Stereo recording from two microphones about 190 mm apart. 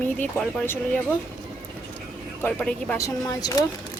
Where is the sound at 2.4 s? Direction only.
10° left (ahead or behind).